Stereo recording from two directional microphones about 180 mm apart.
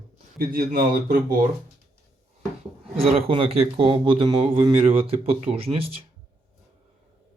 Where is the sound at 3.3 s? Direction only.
30° right (ahead or behind).